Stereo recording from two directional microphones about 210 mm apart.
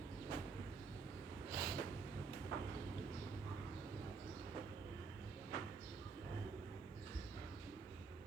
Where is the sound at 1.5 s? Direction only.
15° right (ahead or behind).